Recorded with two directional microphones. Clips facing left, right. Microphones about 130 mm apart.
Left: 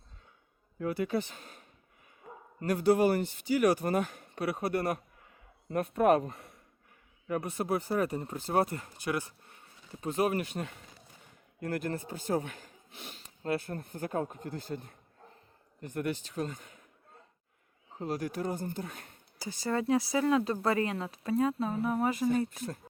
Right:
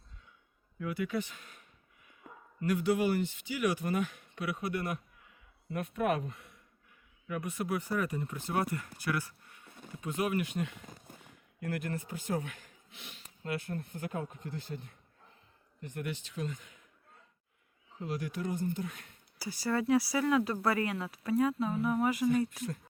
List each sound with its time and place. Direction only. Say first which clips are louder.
0.8 s speech: left 3 dB; 35° left (ahead or behind)
9.6 s a sound: right 7 dB; 55° right (ahead or behind)
9.9 s speech: left 3 dB; 35° left (ahead or behind)
10.8 s a sound: right 5 dB; 45° right (ahead or behind)
11.6 s speech: left 3 dB; 35° left (ahead or behind)
17.9 s speech: left 3 dB; 40° left (ahead or behind)
19.4 s speech: even; 20° left (ahead or behind)